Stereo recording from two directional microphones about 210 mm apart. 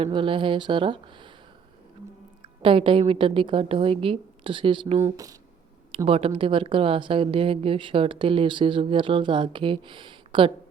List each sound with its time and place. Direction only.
0.0 s a woman's voice: 25° right (ahead or behind)
2.4 s a woman's voice: 25° right (ahead or behind)
6.1 s a woman's voice: 25° right (ahead or behind)